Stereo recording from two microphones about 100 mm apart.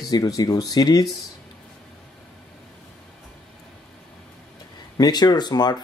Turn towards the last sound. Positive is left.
turn(degrees=45)  # may be behind; listen again after turning